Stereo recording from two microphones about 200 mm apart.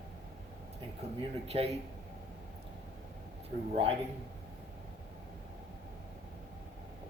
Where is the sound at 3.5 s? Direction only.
40° right (ahead or behind).